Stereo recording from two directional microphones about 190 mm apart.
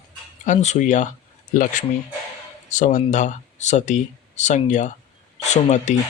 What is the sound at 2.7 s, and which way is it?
A man's voice, 40° left (ahead or behind).